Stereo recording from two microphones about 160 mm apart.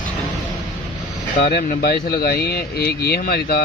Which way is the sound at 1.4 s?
85° left.